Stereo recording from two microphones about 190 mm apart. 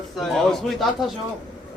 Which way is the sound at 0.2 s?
Centre (ahead or behind).